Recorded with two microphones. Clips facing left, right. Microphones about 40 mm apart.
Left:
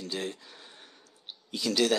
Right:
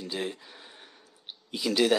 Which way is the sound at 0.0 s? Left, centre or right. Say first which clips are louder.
Right 1 dB; centre.